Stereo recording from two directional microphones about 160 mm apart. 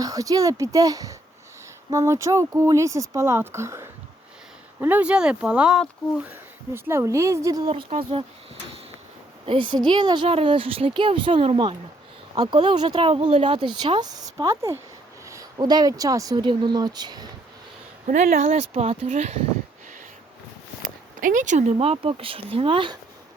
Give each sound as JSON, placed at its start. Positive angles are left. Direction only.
{"t": 0.0, "sound": "speech", "side_deg": -20}
{"t": 6.7, "sound": "speech", "side_deg": -15}
{"t": 7.7, "sound": "speech", "side_deg": -35}
{"t": 9.5, "sound": "speech", "side_deg": -30}
{"t": 18.0, "sound": "speech", "side_deg": -45}
{"t": 20.8, "sound": "speech", "side_deg": -60}